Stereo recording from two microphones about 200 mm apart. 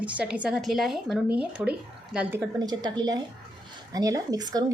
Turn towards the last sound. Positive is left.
turn(degrees=-20)  # may be behind; listen again after turning